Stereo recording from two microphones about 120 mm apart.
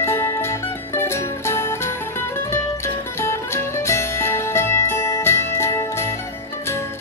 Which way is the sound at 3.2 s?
25° left (ahead or behind).